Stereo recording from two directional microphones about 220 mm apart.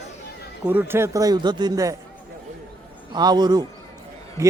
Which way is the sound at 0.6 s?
10° right (ahead or behind).